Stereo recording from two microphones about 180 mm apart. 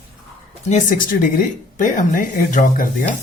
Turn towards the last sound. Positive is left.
turn(degrees=50)  # may be behind; listen again after turning